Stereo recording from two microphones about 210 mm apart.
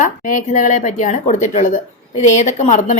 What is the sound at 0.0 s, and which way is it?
A woman's voice, 40° left (ahead or behind).